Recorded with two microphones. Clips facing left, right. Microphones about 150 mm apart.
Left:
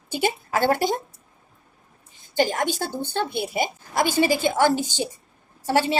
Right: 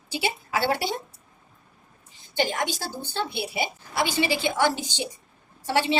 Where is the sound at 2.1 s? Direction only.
45° left (ahead or behind).